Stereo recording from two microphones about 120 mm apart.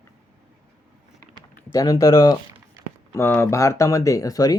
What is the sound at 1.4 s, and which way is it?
Speech, 30° left (ahead or behind).